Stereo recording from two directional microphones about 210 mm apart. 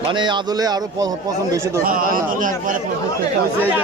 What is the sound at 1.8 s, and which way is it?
Speech, 40° right (ahead or behind).